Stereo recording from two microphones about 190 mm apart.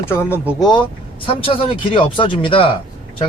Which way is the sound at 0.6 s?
25° left (ahead or behind).